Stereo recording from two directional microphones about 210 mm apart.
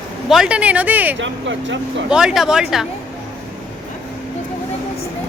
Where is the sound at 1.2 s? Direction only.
60° right (ahead or behind).